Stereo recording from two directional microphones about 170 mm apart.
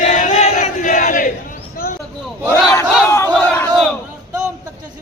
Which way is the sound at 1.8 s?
55° left (ahead or behind).